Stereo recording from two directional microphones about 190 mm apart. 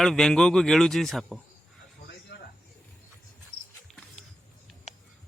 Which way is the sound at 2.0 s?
55° left (ahead or behind).